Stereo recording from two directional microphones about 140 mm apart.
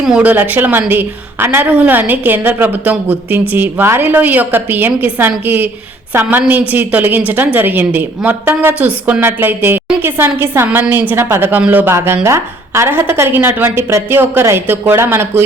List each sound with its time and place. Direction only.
0.0 s speech: 5° right (ahead or behind)